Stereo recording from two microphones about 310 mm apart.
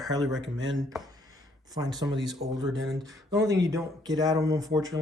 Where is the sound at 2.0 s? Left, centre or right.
Centre.